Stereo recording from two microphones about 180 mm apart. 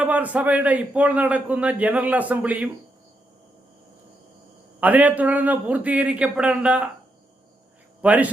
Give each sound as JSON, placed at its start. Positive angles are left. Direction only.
{"t": 0.0, "sound": "a man's voice", "side_deg": -10}
{"t": 4.8, "sound": "a man's voice", "side_deg": -10}
{"t": 8.0, "sound": "a man's voice", "side_deg": -5}